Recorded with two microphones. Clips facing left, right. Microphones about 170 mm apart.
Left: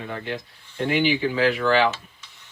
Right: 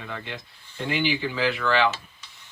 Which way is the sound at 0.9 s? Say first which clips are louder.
Left 4 dB; 50° left (ahead or behind).